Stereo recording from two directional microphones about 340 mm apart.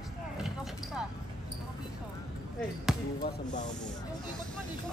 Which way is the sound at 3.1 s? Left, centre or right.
Left.